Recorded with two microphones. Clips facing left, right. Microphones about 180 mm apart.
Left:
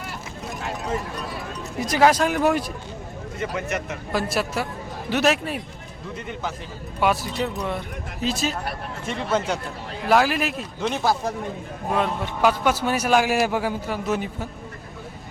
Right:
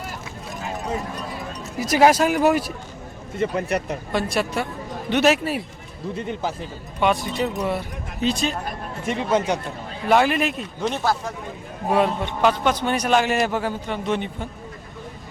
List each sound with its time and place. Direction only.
1.8 s speech: 10° right (ahead or behind)
3.3 s speech: 30° right (ahead or behind)
4.1 s speech: centre (ahead or behind)
6.1 s speech: 35° right (ahead or behind)
7.0 s speech: 5° left (ahead or behind)
9.0 s speech: 10° right (ahead or behind)
10.1 s speech: centre (ahead or behind)
12.2 s a man's voice: 10° left (ahead or behind)